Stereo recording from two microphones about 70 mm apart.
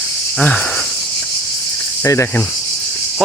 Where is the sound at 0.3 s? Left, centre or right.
Centre.